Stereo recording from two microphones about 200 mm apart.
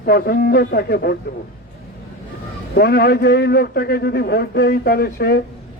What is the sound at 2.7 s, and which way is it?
A man's voice, 55° left (ahead or behind).